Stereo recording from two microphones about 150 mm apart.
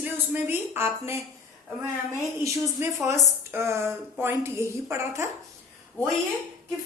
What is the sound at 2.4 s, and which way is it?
A woman's voice, 20° right (ahead or behind).